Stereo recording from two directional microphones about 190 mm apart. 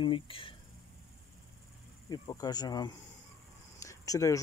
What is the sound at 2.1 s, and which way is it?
Speech, 20° left (ahead or behind).